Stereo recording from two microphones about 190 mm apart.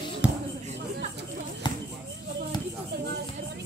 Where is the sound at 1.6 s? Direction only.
25° left (ahead or behind).